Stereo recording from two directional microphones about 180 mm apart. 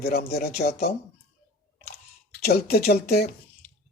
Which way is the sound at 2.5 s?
60° left (ahead or behind).